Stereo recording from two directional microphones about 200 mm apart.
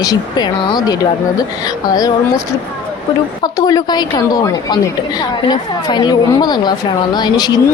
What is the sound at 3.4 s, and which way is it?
Speech, 20° left (ahead or behind).